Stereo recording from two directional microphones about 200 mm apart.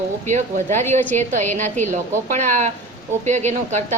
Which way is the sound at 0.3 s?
35° right (ahead or behind).